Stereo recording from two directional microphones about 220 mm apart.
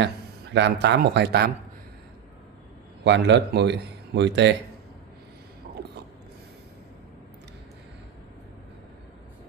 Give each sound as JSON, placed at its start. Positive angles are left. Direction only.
{"t": 0.0, "sound": "speech", "side_deg": -50}
{"t": 3.0, "sound": "a man's voice", "side_deg": -55}